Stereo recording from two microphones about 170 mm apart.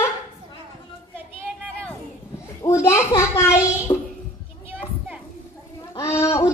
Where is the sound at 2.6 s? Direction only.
15° left (ahead or behind).